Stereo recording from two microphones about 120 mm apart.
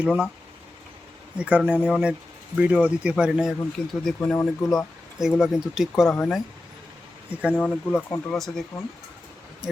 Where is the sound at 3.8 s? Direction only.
10° left (ahead or behind).